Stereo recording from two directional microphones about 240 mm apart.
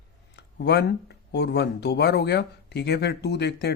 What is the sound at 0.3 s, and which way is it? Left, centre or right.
Speech, left.